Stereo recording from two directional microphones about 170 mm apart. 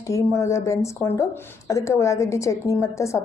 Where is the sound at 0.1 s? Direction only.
15° left (ahead or behind).